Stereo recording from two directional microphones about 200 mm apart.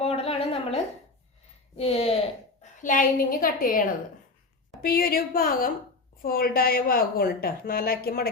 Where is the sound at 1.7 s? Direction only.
30° left (ahead or behind).